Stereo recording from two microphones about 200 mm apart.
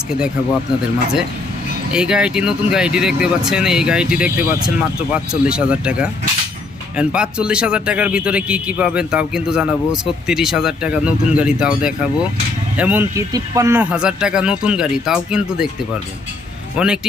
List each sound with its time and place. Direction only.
1.9 s speech: 5° right (ahead or behind)
16.7 s speech: 5° right (ahead or behind)